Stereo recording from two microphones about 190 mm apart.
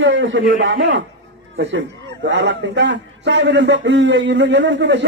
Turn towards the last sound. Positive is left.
turn(degrees=-70)  # may be behind; listen again after turning